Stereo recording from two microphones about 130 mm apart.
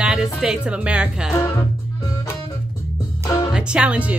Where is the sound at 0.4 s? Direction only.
5° right (ahead or behind).